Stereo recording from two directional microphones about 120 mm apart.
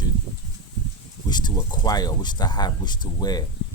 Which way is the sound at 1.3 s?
35° left (ahead or behind).